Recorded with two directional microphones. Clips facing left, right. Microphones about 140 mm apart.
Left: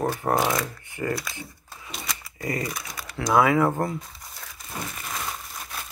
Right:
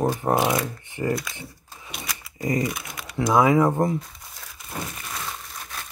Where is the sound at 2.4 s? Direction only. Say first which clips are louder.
Right 5 dB; 20° right (ahead or behind).